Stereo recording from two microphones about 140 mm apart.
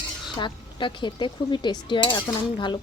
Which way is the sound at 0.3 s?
35° left (ahead or behind).